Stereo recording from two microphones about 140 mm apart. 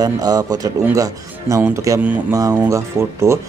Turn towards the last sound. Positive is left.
turn(degrees=-20)  # may be behind; listen again after turning